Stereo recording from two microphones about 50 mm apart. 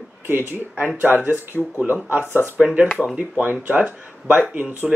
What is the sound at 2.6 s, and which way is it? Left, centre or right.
Speech, centre.